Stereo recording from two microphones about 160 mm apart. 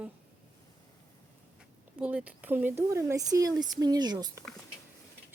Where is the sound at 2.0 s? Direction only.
10° right (ahead or behind); by 4.5 s 25° right (ahead or behind).